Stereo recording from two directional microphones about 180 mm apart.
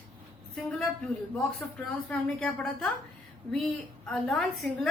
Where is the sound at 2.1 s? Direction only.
5° left (ahead or behind).